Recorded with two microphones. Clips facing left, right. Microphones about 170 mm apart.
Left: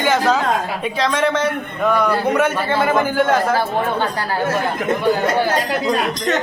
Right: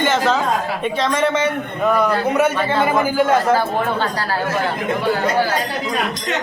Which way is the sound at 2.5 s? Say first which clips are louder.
Even; 5° left (ahead or behind).